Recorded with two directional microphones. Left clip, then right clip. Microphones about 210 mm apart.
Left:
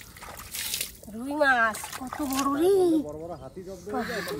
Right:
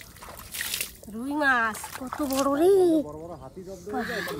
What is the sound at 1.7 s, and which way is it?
Speech, 20° left (ahead or behind).